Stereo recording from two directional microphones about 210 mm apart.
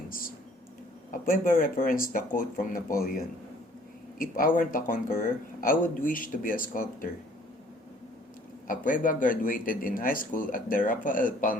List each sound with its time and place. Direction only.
1.1 s speech: 40° left (ahead or behind)
4.2 s speech: 40° left (ahead or behind)
8.6 s speech: 40° left (ahead or behind)